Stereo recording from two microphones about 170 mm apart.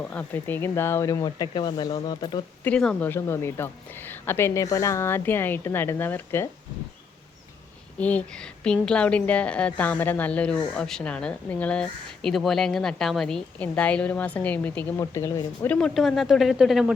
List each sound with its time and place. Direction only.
0.0 s speech: 5° left (ahead or behind); by 2.4 s 25° left (ahead or behind)
2.6 s speech: 5° left (ahead or behind)
7.9 s speech: 10° left (ahead or behind)
15.7 s speech: centre (ahead or behind)